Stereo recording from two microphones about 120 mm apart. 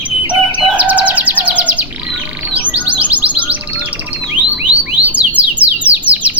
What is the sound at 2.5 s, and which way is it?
Music, 10° right (ahead or behind).